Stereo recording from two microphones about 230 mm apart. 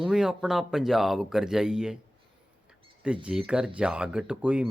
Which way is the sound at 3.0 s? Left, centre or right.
Centre.